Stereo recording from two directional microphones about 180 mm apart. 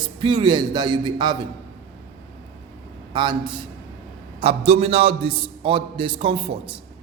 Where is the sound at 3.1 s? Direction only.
25° right (ahead or behind).